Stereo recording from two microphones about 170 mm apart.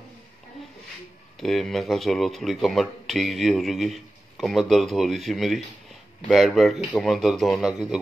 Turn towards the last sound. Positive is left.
turn(degrees=0)  # may be behind; listen again after turning